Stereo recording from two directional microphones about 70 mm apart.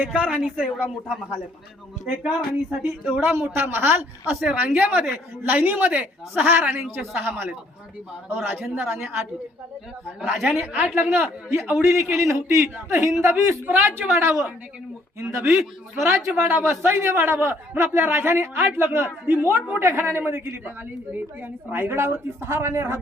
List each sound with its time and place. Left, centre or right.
0.0 s a woman's voice: centre
3.3 s a man's voice: right
10.3 s a woman's voice: centre
10.6 s a man's voice: right